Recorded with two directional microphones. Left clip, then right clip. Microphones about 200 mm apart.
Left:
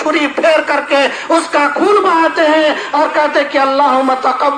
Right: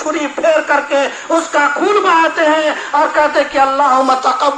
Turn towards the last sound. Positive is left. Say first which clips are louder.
# even
turn(degrees=35)  # may be behind; listen again after turning